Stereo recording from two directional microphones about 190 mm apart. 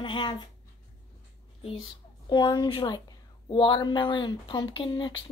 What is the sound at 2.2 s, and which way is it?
Speech, 20° left (ahead or behind).